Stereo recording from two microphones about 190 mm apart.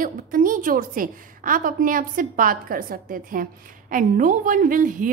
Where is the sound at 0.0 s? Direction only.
45° right (ahead or behind).